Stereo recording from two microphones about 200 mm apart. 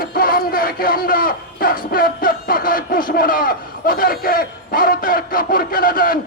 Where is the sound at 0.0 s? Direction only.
45° left (ahead or behind).